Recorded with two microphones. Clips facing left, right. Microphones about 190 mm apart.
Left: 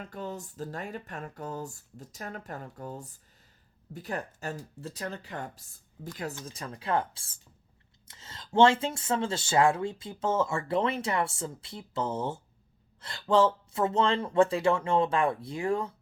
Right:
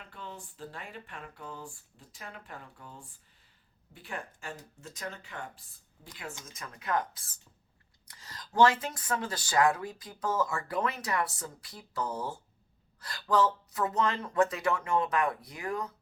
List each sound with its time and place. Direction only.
0.0 s speech: 40° left (ahead or behind)
6.4 s speech: 30° left (ahead or behind)